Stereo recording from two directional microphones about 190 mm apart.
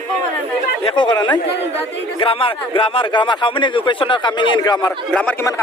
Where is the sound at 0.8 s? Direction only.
25° left (ahead or behind).